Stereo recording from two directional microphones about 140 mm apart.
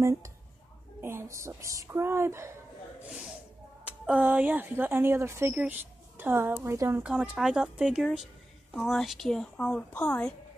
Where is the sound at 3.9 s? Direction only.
10° right (ahead or behind).